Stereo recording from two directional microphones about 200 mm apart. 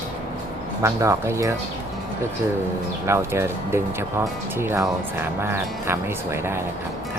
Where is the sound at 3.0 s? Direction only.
15° right (ahead or behind).